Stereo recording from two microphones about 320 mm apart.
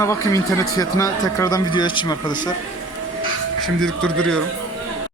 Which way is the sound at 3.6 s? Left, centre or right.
Centre.